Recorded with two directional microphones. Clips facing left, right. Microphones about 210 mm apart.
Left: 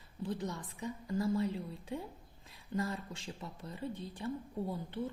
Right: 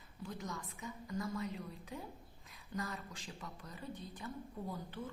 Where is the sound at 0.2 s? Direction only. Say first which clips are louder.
Left 6 dB; 30° left (ahead or behind).